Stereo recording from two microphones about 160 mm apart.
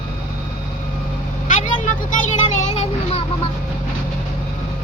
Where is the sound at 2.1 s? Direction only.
45° left (ahead or behind).